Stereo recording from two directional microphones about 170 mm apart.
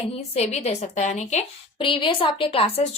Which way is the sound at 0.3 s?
40° left (ahead or behind).